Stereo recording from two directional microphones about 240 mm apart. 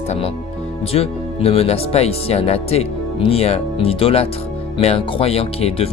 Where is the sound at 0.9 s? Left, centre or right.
Left.